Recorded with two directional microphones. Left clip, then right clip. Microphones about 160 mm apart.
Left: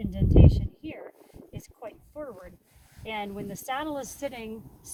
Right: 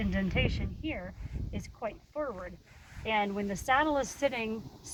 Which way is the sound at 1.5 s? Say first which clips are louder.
Right 4 dB; 25° left (ahead or behind).